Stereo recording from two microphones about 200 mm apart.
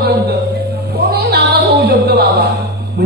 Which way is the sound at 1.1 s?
55° right (ahead or behind).